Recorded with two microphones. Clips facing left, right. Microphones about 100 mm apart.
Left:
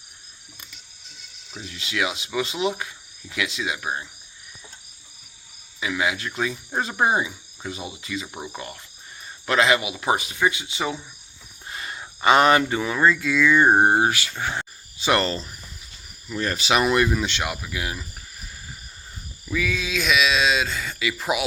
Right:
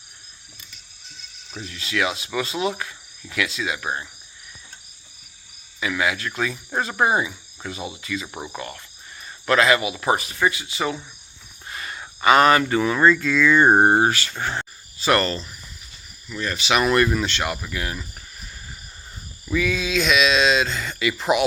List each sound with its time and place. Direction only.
1.5 s cricket: 20° left (ahead or behind)
5.8 s cricket: 20° left (ahead or behind)
7.2 s speech: 20° left (ahead or behind)
8.0 s cricket: 20° left (ahead or behind)
8.5 s speech: 15° left (ahead or behind)
9.2 s cricket: 20° left (ahead or behind)
11.7 s speech: 20° left (ahead or behind)
16.3 s speech: 35° left (ahead or behind)
16.8 s speech: 10° left (ahead or behind)
19.5 s speech: centre (ahead or behind)